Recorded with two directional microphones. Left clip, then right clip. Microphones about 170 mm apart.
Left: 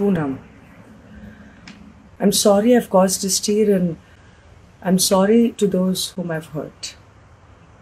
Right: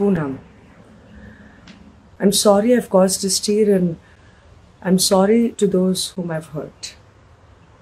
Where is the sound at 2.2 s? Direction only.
15° right (ahead or behind).